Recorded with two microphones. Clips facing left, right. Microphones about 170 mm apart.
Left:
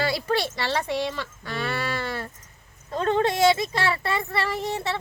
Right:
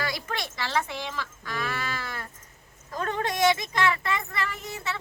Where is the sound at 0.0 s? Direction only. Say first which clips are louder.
Left 8 dB; 30° left (ahead or behind).